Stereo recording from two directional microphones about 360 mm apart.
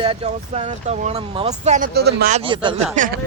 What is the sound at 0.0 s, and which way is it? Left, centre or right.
Speech, centre.